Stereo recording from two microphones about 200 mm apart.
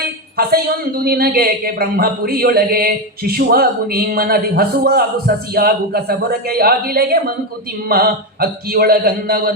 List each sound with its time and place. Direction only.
0.3 s a man's voice: 50° right (ahead or behind)